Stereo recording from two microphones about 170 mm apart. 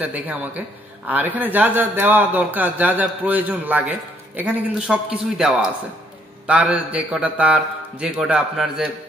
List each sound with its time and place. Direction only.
0.0 s a man's voice: 10° right (ahead or behind)